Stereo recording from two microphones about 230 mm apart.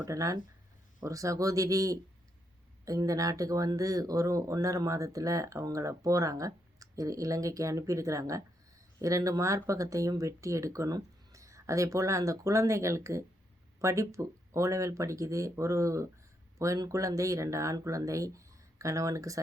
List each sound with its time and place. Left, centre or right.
0.0 s speech: centre